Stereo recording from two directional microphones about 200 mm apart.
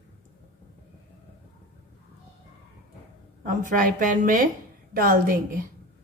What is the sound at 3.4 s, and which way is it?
A woman's voice, 40° right (ahead or behind).